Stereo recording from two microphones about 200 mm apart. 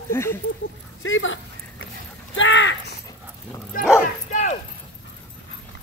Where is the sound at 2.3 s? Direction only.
70° left (ahead or behind).